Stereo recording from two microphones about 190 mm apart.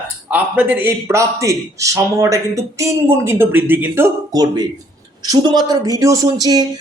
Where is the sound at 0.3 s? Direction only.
10° right (ahead or behind).